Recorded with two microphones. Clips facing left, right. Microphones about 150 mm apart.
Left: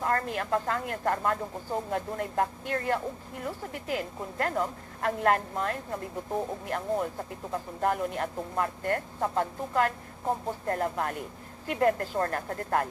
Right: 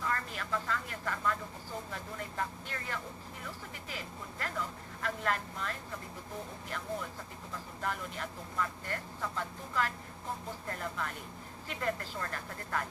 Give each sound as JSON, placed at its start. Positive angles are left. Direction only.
{"t": 0.0, "sound": "speech", "side_deg": 55}